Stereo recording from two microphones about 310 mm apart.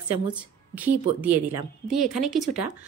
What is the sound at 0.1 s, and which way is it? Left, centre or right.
A woman's voice, centre.